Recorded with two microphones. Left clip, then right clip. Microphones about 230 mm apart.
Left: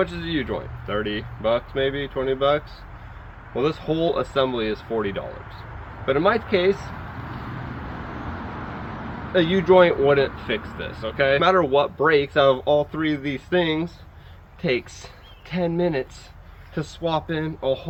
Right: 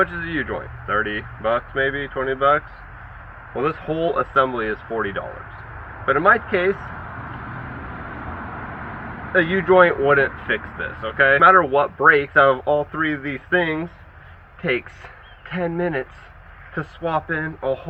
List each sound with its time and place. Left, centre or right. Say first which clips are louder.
0.0 s speech: right 3 dB; left
9.3 s speech: right 1 dB; left
17.1 s speech: right 2 dB; left